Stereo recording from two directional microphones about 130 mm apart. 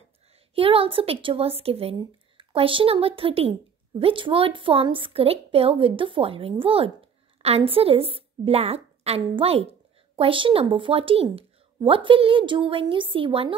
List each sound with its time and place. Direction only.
0.6 s speech: 45° right (ahead or behind)